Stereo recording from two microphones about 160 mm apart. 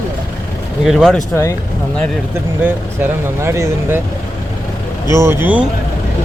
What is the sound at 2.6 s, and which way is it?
Speech, 15° right (ahead or behind).